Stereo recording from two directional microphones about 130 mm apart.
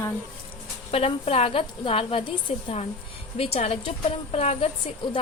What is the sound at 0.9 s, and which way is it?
A woman's voice, 50° left (ahead or behind).